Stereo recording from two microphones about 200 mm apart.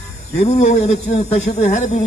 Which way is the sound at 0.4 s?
35° left (ahead or behind).